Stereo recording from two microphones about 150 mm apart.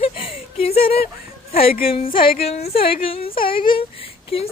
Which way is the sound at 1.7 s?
80° left.